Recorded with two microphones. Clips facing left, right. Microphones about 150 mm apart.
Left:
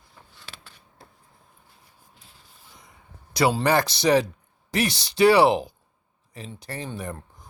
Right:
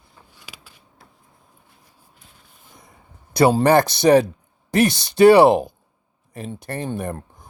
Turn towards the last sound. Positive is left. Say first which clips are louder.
# right 6 dB
turn(degrees=-55)  # may be behind; listen again after turning